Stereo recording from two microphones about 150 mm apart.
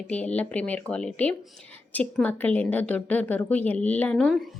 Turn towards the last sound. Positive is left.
turn(degrees=5)  # may be behind; listen again after turning